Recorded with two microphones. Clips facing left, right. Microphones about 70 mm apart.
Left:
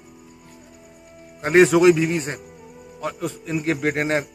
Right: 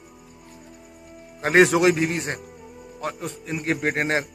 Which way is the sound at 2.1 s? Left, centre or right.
Centre.